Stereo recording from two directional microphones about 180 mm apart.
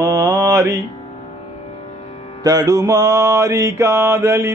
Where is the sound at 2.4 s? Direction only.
20° right (ahead or behind).